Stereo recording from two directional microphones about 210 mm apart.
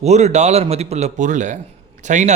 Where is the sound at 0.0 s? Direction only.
30° right (ahead or behind).